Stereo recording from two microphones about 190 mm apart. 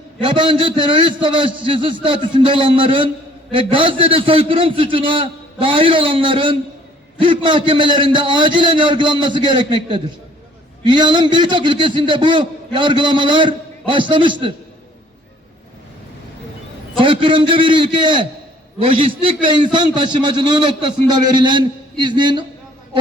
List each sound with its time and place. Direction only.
0.2 s a man's voice: 25° right (ahead or behind)
17.0 s a man's voice: 25° right (ahead or behind)